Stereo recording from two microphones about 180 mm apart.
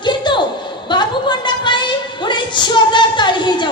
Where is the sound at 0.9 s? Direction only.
25° left (ahead or behind).